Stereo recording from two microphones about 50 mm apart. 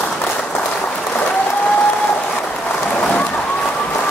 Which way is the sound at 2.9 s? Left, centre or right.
Left.